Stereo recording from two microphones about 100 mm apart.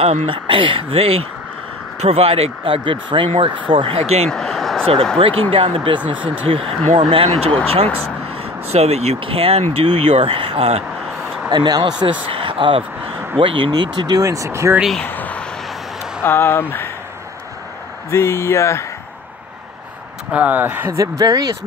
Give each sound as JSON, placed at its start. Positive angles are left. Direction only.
{"t": 0.0, "sound": "speech", "side_deg": -70}
{"t": 2.0, "sound": "speech", "side_deg": -90}
{"t": 4.3, "sound": "a sound", "side_deg": 5}
{"t": 5.1, "sound": "speech", "side_deg": -65}
{"t": 8.6, "sound": "speech", "side_deg": -90}
{"t": 11.4, "sound": "speech", "side_deg": -45}
{"t": 12.3, "sound": "speech", "side_deg": -60}
{"t": 13.7, "sound": "speech", "side_deg": -50}
{"t": 14.2, "sound": "speech", "side_deg": -35}
{"t": 15.0, "sound": "vehicle", "side_deg": 15}
{"t": 16.2, "sound": "speech", "side_deg": 25}
{"t": 18.1, "sound": "speech", "side_deg": 30}
{"t": 20.2, "sound": "speech", "side_deg": -15}
{"t": 21.0, "sound": "speech", "side_deg": -35}